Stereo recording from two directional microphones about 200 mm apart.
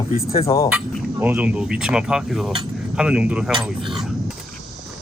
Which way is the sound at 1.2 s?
10° right (ahead or behind).